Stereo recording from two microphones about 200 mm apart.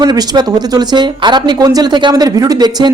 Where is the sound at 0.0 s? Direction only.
20° right (ahead or behind).